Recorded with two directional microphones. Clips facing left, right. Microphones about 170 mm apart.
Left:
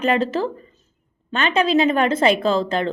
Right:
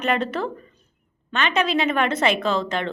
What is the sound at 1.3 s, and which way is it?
Speech, 35° left (ahead or behind).